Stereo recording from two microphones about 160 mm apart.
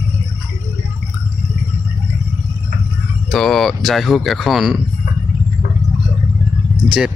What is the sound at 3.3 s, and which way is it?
Speech, centre (ahead or behind).